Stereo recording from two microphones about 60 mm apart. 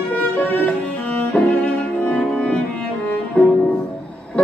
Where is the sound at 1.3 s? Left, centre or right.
Left.